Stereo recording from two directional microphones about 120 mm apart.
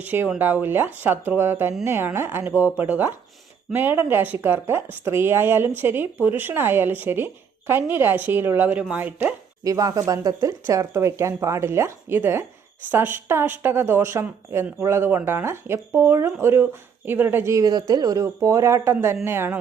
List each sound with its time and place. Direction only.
0.0 s a woman's voice: 15° right (ahead or behind)
9.6 s a woman's voice: 30° right (ahead or behind)